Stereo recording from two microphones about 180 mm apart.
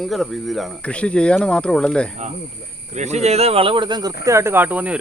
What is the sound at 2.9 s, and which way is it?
Speech, 40° right (ahead or behind).